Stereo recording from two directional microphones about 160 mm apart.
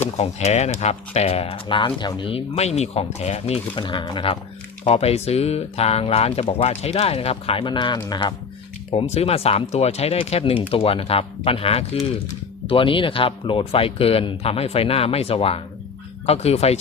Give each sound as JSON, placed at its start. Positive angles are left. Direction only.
{"t": 0.2, "sound": "speech", "side_deg": 45}
{"t": 9.0, "sound": "speech", "side_deg": 40}